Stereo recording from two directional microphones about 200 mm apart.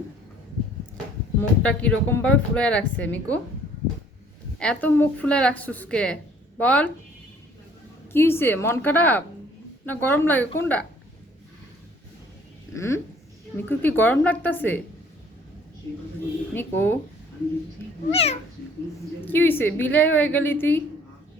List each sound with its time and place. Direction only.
1.4 s speech: 10° left (ahead or behind)
4.6 s speech: 5° left (ahead or behind)
8.1 s speech: 10° left (ahead or behind)
12.7 s speech: 15° left (ahead or behind)
16.6 s speech: 10° left (ahead or behind)
18.1 s speech: 30° left (ahead or behind)
19.2 s speech: 10° left (ahead or behind)